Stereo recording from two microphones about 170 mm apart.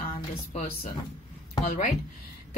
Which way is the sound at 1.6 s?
50° left (ahead or behind).